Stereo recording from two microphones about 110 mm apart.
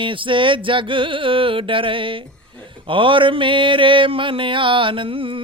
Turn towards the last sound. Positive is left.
turn(degrees=-55)  # may be behind; listen again after turning